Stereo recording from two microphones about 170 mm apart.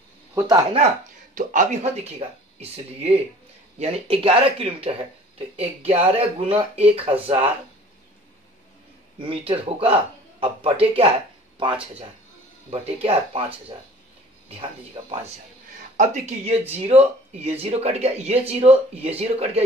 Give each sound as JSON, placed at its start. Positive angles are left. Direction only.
{"t": 0.3, "sound": "a man's voice", "side_deg": -20}
{"t": 0.7, "sound": "speech", "side_deg": -45}
{"t": 9.5, "sound": "speech", "side_deg": -35}
{"t": 12.8, "sound": "speech", "side_deg": -35}
{"t": 14.5, "sound": "speech", "side_deg": -30}
{"t": 16.0, "sound": "speech", "side_deg": -45}